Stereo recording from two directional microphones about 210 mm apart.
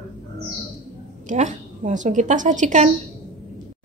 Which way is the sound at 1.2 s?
35° right (ahead or behind).